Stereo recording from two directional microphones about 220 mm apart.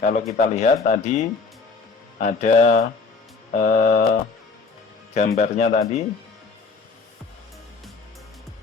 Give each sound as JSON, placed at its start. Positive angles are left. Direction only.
{"t": 0.0, "sound": "a man's voice", "side_deg": 35}